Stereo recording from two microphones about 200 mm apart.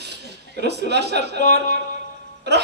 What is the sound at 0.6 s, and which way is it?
Mantra, 55° right (ahead or behind).